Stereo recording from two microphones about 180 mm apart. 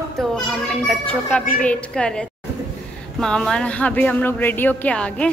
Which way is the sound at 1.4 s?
50° left (ahead or behind).